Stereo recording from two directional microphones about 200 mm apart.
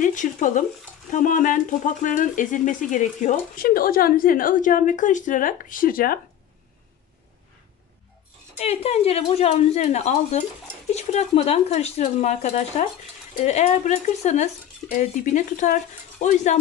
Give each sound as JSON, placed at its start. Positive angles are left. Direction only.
{"t": 0.0, "sound": "speech", "side_deg": 40}
{"t": 8.5, "sound": "speech", "side_deg": 30}